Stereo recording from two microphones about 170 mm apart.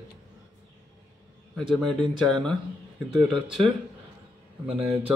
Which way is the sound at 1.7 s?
5° left (ahead or behind).